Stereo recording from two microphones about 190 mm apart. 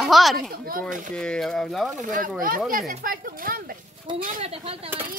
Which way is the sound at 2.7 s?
50° right (ahead or behind).